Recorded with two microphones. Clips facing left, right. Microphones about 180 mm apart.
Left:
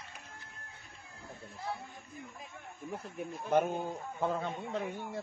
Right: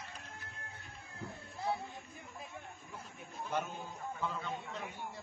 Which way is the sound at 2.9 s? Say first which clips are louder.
Left 13 dB; 60° left (ahead or behind).